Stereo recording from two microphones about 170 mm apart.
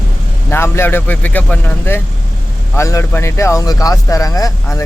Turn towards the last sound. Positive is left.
turn(degrees=20)  # may be behind; listen again after turning